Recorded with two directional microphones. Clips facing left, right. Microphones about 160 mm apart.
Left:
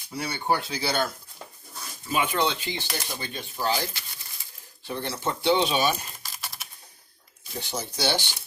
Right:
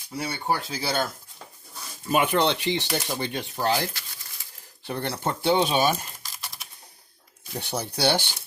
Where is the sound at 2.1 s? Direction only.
60° right (ahead or behind).